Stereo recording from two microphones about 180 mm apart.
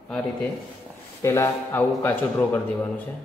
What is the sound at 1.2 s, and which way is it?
A man's voice, 15° left (ahead or behind).